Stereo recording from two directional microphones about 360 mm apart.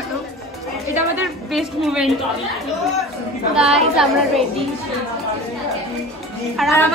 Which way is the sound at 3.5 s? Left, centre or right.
Centre.